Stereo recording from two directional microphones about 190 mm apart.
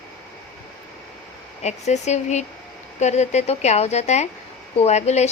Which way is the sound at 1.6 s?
35° left (ahead or behind).